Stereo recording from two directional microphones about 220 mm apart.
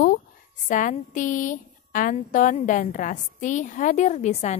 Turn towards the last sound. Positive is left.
turn(degrees=30)  # may be behind; listen again after turning